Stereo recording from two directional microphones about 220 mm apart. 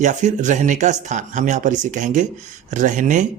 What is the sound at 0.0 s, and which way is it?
Speech, 35° right (ahead or behind).